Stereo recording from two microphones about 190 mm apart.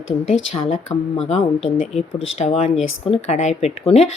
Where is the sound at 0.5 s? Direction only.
30° left (ahead or behind).